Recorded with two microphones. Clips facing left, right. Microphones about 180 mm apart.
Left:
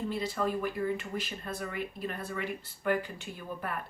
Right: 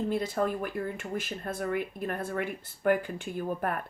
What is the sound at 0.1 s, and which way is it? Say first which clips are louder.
Speech: right 3 dB; 50° right (ahead or behind).